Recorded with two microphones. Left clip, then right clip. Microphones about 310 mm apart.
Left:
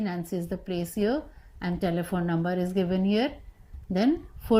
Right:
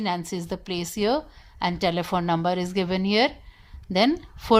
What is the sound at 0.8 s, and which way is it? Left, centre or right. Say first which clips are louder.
Speech: right 4 dB; right.